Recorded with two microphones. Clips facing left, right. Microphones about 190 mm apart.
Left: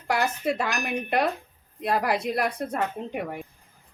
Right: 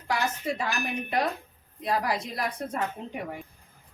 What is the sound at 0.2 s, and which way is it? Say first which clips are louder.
A woman's voice: left 4 dB; 65° left (ahead or behind).